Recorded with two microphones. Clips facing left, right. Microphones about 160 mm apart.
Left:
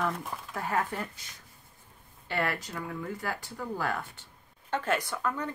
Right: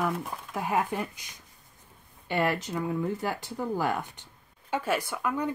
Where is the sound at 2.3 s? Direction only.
20° right (ahead or behind).